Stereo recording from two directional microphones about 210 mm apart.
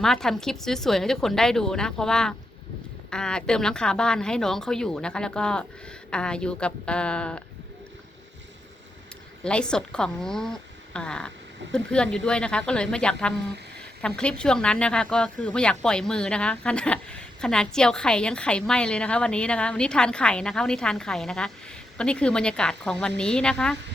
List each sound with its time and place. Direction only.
0.0 s speech: centre (ahead or behind)
9.4 s speech: 5° left (ahead or behind)